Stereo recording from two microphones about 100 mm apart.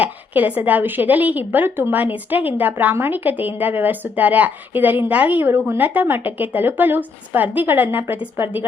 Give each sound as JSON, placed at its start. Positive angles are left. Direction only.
{"t": 0.0, "sound": "speech", "side_deg": -15}